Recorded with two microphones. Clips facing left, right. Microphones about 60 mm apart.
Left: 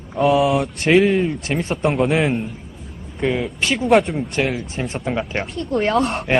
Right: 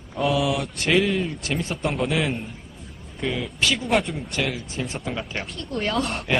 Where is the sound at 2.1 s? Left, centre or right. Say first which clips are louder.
Left 6 dB; left.